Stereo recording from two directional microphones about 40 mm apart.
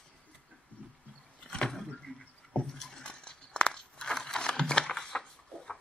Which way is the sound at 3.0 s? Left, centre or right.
Left.